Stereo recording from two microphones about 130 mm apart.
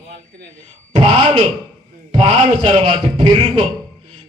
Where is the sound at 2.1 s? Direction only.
55° right (ahead or behind).